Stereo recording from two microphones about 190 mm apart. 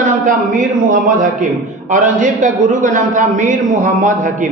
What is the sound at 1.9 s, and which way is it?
A man's voice, 40° right (ahead or behind).